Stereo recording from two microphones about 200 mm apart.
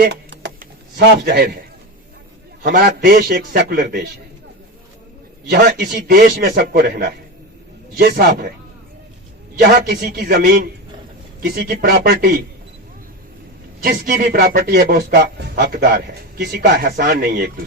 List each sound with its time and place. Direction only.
0.0 s a sound: 60° right (ahead or behind)
2.9 s a man's voice: 40° right (ahead or behind)
5.5 s speech: 50° right (ahead or behind)
9.6 s speech: 55° right (ahead or behind)
13.8 s speech: 45° right (ahead or behind)